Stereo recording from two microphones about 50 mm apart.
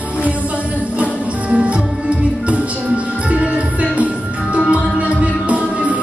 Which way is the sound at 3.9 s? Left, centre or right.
Right.